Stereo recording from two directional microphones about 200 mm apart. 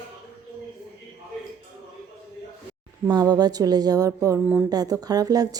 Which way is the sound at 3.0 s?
20° right (ahead or behind).